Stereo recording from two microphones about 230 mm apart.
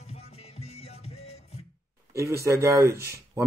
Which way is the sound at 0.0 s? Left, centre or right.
Left.